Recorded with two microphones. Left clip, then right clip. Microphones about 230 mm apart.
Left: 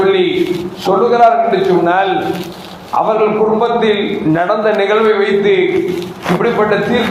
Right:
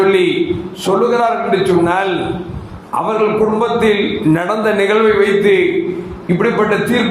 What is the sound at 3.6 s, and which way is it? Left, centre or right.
A man's voice, right.